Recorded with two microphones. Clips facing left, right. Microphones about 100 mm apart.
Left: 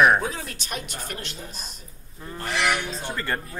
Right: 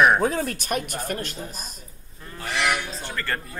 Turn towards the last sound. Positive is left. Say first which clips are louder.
# left 1 dB
turn(degrees=15)  # may be behind; listen again after turning